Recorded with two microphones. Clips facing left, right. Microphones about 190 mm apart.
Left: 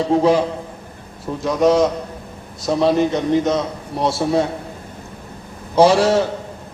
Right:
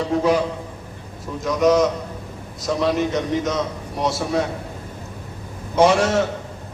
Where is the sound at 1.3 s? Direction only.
35° left (ahead or behind).